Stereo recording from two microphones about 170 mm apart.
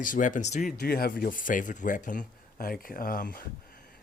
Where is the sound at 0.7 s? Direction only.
60° left (ahead or behind).